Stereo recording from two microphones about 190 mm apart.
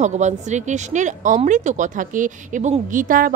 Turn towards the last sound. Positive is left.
turn(degrees=-45)  # may be behind; listen again after turning